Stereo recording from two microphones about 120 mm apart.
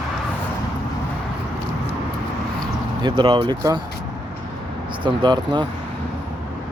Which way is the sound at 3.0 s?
40° right (ahead or behind).